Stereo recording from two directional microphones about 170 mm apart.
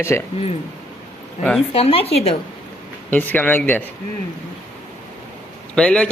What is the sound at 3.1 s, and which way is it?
Speech, 10° left (ahead or behind).